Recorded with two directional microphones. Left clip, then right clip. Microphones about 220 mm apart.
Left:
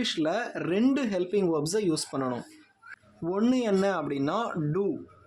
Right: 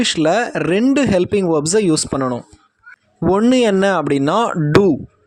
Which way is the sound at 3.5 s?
40° right (ahead or behind).